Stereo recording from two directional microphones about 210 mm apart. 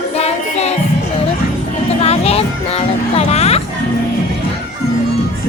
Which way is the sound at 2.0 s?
30° left (ahead or behind).